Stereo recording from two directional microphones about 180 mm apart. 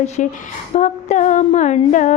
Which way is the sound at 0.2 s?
45° left (ahead or behind).